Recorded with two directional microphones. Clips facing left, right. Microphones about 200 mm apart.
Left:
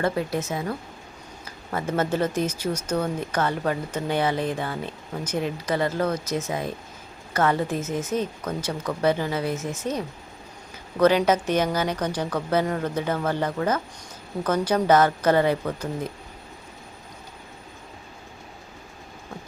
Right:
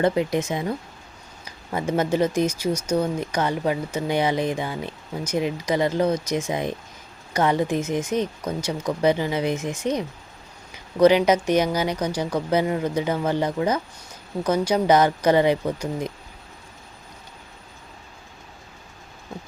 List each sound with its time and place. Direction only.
0.0 s speech: 15° right (ahead or behind)